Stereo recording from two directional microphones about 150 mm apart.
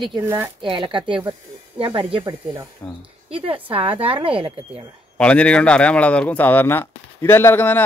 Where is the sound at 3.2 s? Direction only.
35° right (ahead or behind).